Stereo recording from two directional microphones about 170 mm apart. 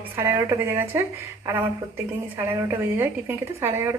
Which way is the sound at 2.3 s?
15° right (ahead or behind).